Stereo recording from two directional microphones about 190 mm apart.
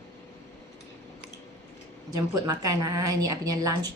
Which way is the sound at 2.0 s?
20° right (ahead or behind).